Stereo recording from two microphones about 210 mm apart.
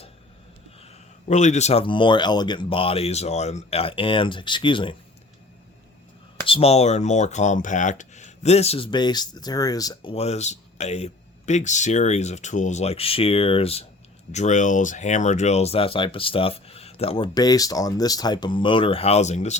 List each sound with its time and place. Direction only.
1.3 s speech: 35° left (ahead or behind)
6.5 s speech: 30° left (ahead or behind)